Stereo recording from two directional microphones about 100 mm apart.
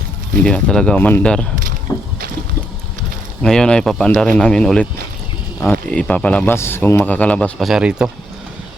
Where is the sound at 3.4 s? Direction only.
5° left (ahead or behind).